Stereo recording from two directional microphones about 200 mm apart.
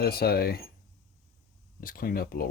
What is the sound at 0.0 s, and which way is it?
Speech, 50° left (ahead or behind).